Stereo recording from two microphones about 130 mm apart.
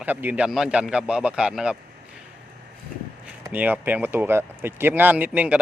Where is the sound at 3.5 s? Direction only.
15° right (ahead or behind).